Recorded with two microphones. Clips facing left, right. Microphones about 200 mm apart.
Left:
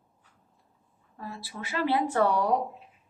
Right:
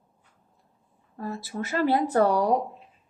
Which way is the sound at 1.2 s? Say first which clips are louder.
Right 7 dB; 45° right (ahead or behind).